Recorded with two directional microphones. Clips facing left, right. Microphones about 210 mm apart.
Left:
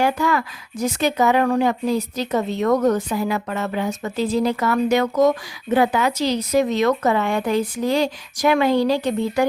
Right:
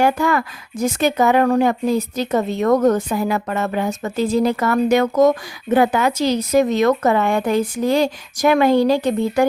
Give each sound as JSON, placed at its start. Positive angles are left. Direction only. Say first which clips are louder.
{"t": 0.0, "sound": "speech", "louder": "right 3 dB", "side_deg": -50}